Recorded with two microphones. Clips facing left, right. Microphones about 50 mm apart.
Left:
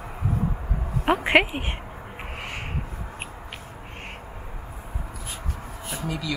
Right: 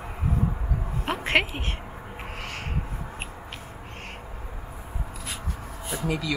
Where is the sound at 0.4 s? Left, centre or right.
Centre.